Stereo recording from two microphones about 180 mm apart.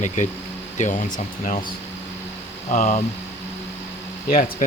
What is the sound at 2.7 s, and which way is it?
Speech, 45° left (ahead or behind).